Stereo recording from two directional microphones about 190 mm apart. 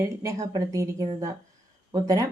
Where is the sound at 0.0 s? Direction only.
15° right (ahead or behind).